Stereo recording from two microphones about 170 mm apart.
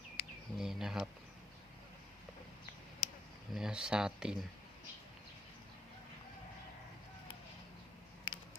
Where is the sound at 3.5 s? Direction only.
5° right (ahead or behind).